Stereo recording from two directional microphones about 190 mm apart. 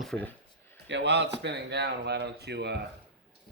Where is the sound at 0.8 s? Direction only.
70° right (ahead or behind).